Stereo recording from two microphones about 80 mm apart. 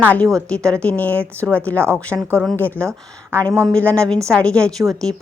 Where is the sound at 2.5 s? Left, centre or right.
Left; by 5.1 s centre.